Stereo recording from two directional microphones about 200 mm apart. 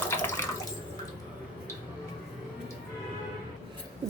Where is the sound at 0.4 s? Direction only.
10° left (ahead or behind).